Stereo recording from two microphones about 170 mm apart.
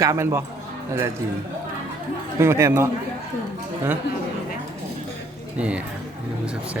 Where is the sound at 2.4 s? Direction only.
15° right (ahead or behind).